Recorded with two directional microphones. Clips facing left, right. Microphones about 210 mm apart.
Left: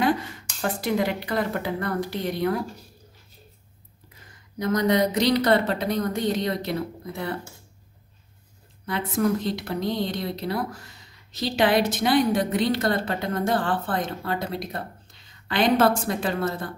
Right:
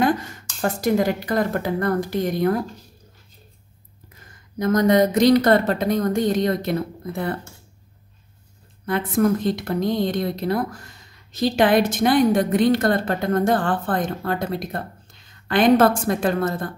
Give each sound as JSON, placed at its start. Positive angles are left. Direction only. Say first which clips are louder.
{"t": 0.0, "sound": "speech", "louder": "right 3 dB", "side_deg": -45}
{"t": 4.6, "sound": "a woman's voice", "louder": "right 5 dB", "side_deg": -45}
{"t": 8.8, "sound": "a woman's voice", "louder": "right 4 dB", "side_deg": -50}